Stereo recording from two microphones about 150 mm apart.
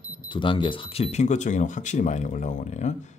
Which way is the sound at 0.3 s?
35° left (ahead or behind).